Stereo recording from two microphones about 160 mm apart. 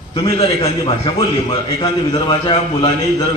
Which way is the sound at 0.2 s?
35° left (ahead or behind).